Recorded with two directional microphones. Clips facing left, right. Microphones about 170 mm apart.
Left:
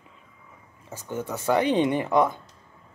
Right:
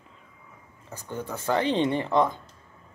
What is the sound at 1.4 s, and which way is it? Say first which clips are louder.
Speech: left 2 dB; 10° left (ahead or behind).